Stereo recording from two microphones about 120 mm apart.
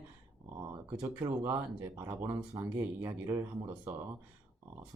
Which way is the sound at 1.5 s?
30° right (ahead or behind).